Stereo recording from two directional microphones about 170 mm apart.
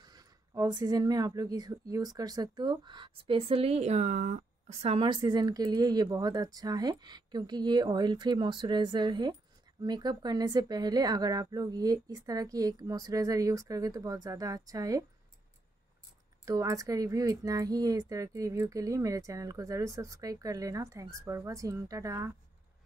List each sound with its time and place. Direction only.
0.0 s speech: 20° right (ahead or behind)
16.4 s speech: 20° right (ahead or behind)